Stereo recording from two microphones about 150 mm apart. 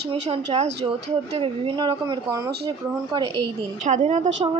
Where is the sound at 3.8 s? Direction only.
50° right (ahead or behind).